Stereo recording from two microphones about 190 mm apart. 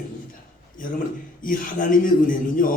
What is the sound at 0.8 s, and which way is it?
A man's voice, 45° left (ahead or behind).